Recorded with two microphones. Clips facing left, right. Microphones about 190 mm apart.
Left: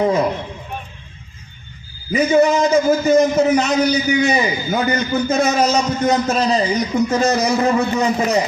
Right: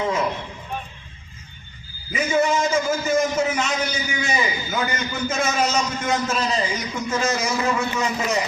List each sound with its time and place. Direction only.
0.0 s a man's voice: 35° left (ahead or behind)
2.1 s a man's voice: 35° left (ahead or behind)